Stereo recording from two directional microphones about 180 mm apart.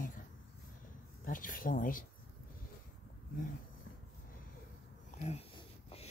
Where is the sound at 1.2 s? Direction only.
50° left (ahead or behind).